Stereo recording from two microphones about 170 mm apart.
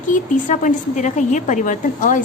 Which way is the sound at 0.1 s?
50° left (ahead or behind).